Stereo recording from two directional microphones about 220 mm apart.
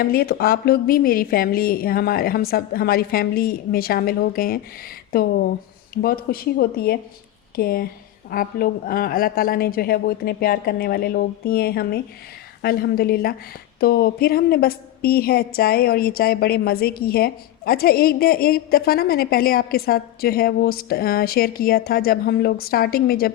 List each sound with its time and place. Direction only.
0.0 s a woman's voice: 45° left (ahead or behind)